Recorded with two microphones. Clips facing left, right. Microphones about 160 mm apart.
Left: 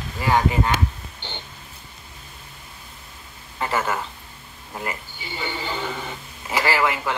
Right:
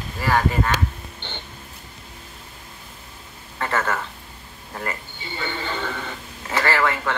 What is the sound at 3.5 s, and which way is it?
Speech, 10° left (ahead or behind).